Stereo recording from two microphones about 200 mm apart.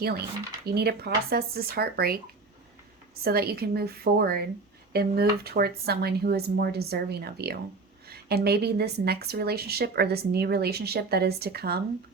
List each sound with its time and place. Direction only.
0.6 s a woman's voice: 50° right (ahead or behind)
3.2 s a woman's voice: 50° right (ahead or behind)